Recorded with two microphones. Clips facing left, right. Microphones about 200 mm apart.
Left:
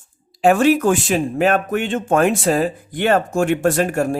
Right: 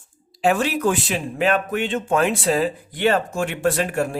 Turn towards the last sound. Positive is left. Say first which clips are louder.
# left 4 dB
turn(degrees=45)  # may be behind; listen again after turning